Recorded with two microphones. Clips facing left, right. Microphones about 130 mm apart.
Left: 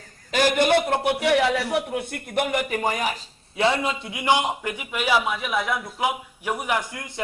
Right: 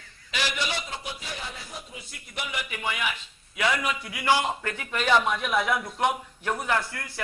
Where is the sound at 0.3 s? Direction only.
50° left (ahead or behind).